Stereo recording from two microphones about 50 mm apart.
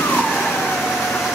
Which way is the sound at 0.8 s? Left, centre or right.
Centre.